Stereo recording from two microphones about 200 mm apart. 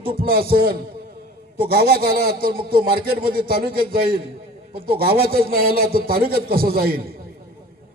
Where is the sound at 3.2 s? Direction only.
50° right (ahead or behind).